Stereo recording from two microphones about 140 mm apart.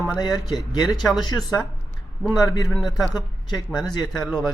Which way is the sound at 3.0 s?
30° left (ahead or behind).